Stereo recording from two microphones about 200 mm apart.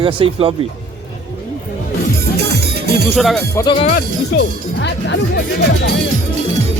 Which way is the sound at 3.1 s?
Centre (ahead or behind).